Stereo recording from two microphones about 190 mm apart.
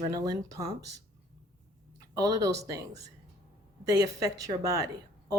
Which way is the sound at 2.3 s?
15° right (ahead or behind).